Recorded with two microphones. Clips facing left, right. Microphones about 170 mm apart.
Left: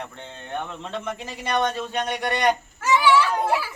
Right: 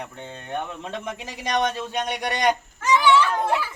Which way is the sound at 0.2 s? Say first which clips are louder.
Right 2 dB; 10° right (ahead or behind).